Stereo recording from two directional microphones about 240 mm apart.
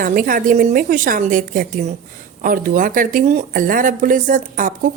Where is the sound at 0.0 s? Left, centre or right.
Right.